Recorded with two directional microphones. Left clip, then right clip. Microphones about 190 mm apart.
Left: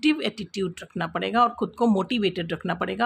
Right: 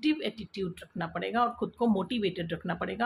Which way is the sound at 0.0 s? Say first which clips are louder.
Left 6 dB; 35° left (ahead or behind).